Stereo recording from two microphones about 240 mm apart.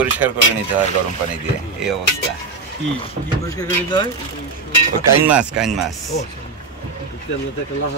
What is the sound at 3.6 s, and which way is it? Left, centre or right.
Speech, centre.